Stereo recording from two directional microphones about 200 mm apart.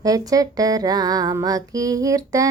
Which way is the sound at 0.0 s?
20° right (ahead or behind).